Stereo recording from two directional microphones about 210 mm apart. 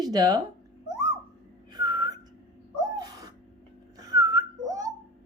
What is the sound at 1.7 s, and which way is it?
Whistling, 20° right (ahead or behind).